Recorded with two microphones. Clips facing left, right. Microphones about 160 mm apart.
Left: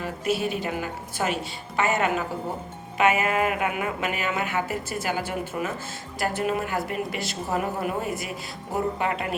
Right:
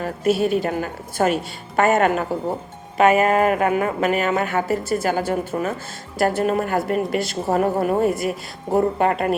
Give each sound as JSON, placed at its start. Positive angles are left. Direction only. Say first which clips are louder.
{"t": 0.0, "sound": "speech", "louder": "right 7 dB", "side_deg": -45}